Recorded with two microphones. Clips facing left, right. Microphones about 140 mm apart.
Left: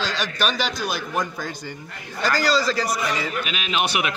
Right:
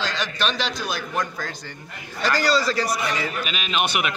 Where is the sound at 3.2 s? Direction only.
5° left (ahead or behind).